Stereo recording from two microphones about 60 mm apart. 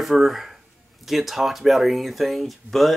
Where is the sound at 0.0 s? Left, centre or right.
Centre.